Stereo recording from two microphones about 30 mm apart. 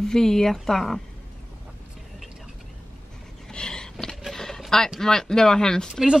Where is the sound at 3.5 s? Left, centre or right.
Left.